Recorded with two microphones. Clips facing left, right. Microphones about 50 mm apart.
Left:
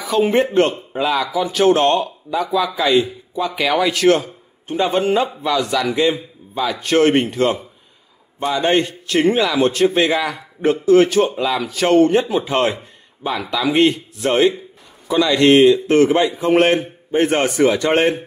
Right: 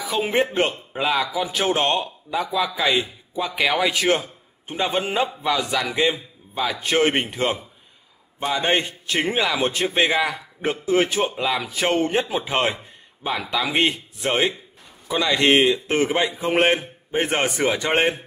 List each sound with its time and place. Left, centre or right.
0.0 s speech: centre